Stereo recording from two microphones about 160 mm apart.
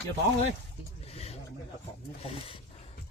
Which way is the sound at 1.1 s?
40° left (ahead or behind).